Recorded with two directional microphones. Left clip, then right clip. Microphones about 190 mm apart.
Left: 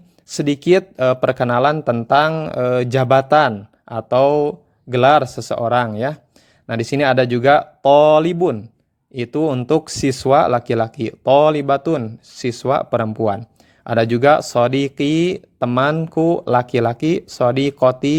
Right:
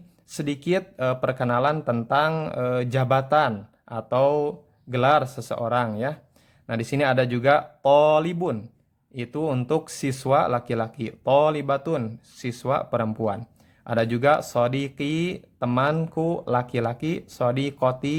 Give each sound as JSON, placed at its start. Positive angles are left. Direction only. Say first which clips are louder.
{"t": 0.3, "sound": "speech", "louder": "left 11 dB", "side_deg": 30}